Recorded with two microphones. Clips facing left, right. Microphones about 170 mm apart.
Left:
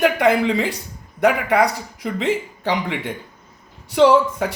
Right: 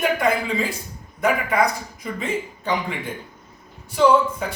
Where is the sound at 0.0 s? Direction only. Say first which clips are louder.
Left 5 dB; 70° left (ahead or behind).